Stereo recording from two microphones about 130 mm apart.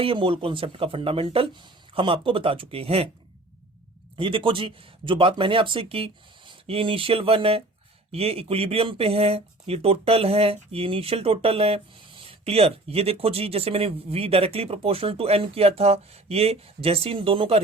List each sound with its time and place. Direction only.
0.0 s speech: 40° right (ahead or behind)
4.2 s speech: 40° right (ahead or behind)